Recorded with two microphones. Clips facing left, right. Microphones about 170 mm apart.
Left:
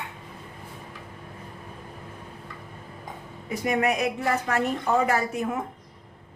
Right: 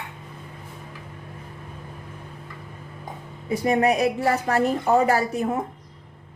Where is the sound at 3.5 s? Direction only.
30° right (ahead or behind).